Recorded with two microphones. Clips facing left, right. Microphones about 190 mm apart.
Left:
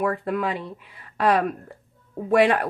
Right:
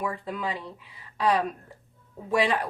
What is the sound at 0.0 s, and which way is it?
Speech, 60° left (ahead or behind).